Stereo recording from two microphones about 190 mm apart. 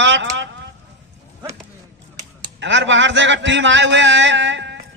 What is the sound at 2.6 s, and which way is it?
A man's voice, 70° right (ahead or behind).